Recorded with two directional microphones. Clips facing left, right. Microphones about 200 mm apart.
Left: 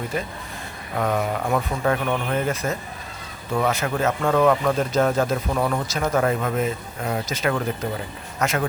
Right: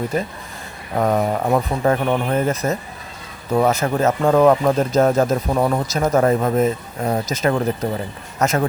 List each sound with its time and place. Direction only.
0.1 s speech: 40° right (ahead or behind)